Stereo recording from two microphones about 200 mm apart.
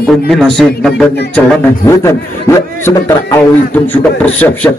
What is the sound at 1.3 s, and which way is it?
Speech, 15° left (ahead or behind).